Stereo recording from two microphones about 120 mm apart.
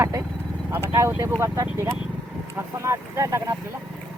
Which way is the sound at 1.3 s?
25° right (ahead or behind).